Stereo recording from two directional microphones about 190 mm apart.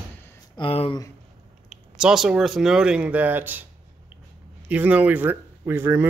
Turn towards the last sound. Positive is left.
turn(degrees=-10)  # may be behind; listen again after turning